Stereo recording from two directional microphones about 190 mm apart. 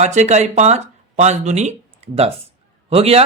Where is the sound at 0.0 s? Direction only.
35° right (ahead or behind).